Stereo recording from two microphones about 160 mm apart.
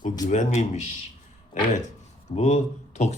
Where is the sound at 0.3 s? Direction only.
45° left (ahead or behind).